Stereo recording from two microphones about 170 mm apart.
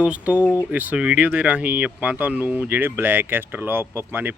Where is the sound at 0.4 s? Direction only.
15° left (ahead or behind).